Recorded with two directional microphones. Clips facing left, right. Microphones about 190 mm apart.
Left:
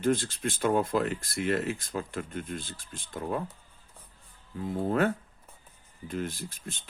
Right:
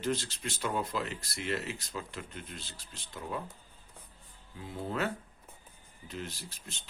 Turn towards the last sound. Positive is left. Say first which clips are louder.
# left 7 dB
turn(degrees=50)  # may be behind; listen again after turning